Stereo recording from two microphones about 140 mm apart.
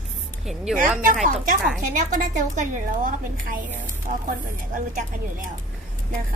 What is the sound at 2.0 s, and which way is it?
A woman's voice, 65° right (ahead or behind).